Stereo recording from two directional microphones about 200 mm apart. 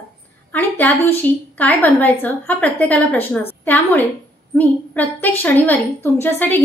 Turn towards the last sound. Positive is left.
turn(degrees=10)  # may be behind; listen again after turning